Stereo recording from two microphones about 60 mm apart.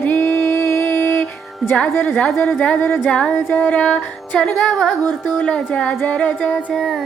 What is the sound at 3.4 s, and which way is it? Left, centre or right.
Music, left.